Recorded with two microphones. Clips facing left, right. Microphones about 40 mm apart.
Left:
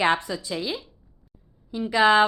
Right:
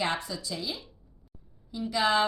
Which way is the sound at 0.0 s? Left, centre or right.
Left.